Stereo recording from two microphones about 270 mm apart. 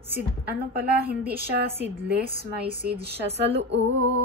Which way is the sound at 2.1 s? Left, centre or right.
Right.